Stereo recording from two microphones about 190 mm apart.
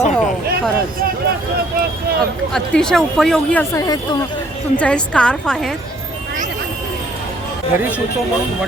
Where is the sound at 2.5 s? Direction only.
5° left (ahead or behind).